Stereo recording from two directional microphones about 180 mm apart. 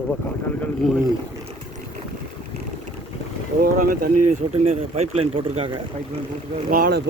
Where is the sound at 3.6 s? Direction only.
55° right (ahead or behind).